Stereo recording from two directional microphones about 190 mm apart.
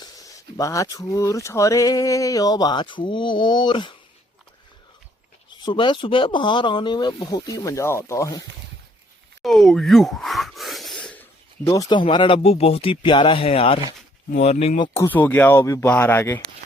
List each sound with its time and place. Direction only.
0.0 s speech: 20° left (ahead or behind)
5.6 s speech: 25° left (ahead or behind)
9.4 s speech: centre (ahead or behind); by 14.8 s 35° left (ahead or behind)
14.8 s speech: 15° left (ahead or behind)